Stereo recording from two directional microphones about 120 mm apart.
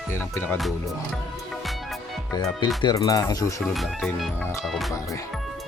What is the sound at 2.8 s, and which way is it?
Speech, 35° left (ahead or behind).